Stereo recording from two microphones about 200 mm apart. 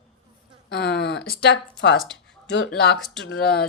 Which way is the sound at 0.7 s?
55° left (ahead or behind).